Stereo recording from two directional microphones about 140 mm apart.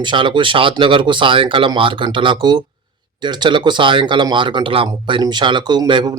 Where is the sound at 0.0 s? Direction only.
35° right (ahead or behind).